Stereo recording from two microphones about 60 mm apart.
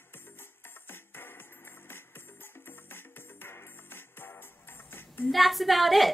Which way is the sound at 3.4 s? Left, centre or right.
Left.